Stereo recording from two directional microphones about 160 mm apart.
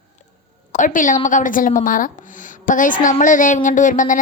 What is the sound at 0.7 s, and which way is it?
A woman's voice, 55° left (ahead or behind).